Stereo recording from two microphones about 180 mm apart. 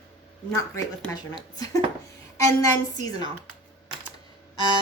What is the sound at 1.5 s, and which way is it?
A woman's voice, 20° left (ahead or behind).